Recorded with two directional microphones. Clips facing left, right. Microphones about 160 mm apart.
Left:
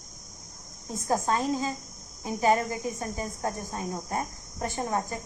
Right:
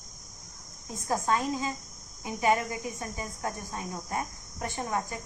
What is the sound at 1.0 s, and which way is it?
Speech, 35° left (ahead or behind).